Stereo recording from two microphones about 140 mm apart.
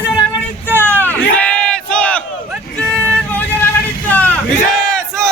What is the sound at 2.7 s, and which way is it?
Music, 10° left (ahead or behind).